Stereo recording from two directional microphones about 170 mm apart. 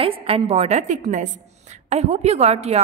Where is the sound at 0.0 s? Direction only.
35° right (ahead or behind).